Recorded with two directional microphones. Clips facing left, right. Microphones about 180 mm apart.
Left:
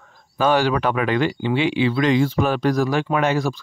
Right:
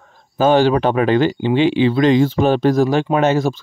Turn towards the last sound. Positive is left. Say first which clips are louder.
# right 5 dB
turn(degrees=-25)  # may be behind; listen again after turning